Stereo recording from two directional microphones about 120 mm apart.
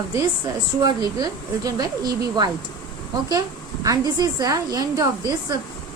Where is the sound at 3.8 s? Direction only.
30° right (ahead or behind).